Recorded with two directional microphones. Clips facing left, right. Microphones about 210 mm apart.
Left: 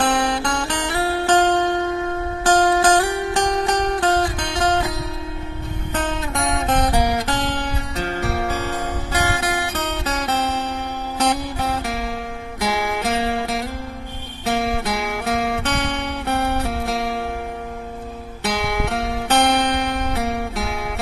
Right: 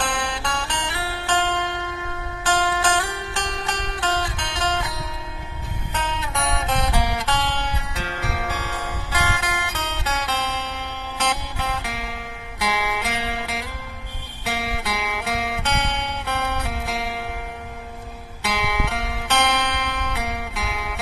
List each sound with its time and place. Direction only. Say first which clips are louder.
0.0 s music: left 7 dB; 40° left (ahead or behind)
6.6 s music: left 7 dB; 45° left (ahead or behind)
18.4 s music: left 3 dB; 45° left (ahead or behind)
19.6 s music: left 6 dB; 45° left (ahead or behind)